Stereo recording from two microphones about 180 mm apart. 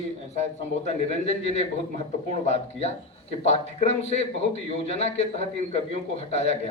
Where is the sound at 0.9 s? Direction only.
35° left (ahead or behind).